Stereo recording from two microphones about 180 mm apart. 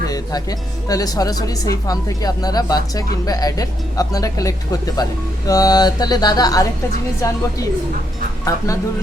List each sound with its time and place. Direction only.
0.1 s music: 20° left (ahead or behind)
0.9 s a woman's voice: 20° left (ahead or behind)
8.4 s speech: 20° left (ahead or behind)